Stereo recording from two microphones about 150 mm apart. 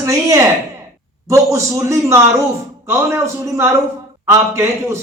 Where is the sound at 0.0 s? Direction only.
20° right (ahead or behind).